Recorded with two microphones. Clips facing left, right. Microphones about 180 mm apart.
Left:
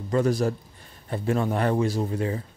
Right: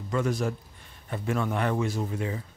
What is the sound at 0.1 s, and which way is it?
Speech, 35° left (ahead or behind).